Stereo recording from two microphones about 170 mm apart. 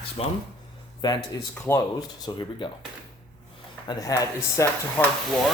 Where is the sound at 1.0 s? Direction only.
25° left (ahead or behind).